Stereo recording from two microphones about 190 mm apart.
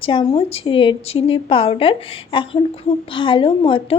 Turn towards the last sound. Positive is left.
turn(degrees=25)  # may be behind; listen again after turning